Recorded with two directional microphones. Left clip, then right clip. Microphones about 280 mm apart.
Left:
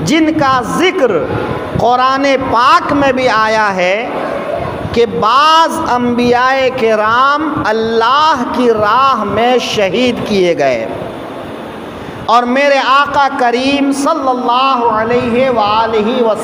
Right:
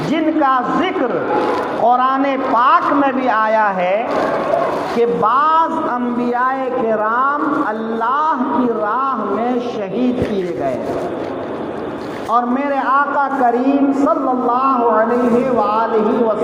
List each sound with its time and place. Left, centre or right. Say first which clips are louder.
0.1 s a man's voice: left 5 dB; left
12.3 s a man's voice: left 8 dB; left